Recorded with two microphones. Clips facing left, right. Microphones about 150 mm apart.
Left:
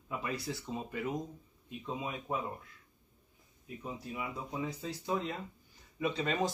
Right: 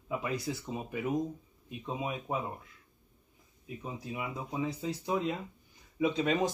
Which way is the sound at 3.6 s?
15° right (ahead or behind).